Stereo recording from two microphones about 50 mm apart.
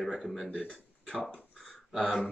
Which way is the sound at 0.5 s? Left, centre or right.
Left.